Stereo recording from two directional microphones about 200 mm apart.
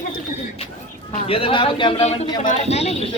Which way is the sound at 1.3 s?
25° left (ahead or behind).